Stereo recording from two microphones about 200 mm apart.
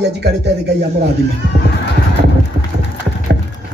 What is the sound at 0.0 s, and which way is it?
Speech, 55° right (ahead or behind).